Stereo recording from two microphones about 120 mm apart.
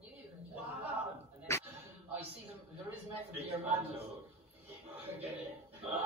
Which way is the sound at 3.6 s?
15° right (ahead or behind).